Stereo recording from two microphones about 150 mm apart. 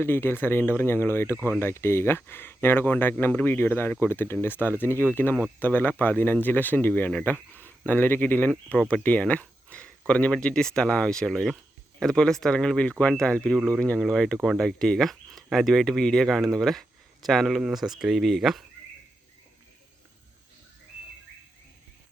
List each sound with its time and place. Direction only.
0.0 s speech: 15° left (ahead or behind); by 18.6 s centre (ahead or behind)